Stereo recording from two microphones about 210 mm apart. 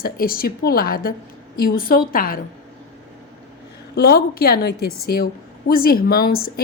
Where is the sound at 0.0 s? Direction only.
45° left (ahead or behind).